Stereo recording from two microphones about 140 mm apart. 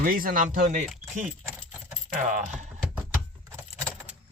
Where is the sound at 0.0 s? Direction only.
90° right; by 0.9 s 65° right (ahead or behind).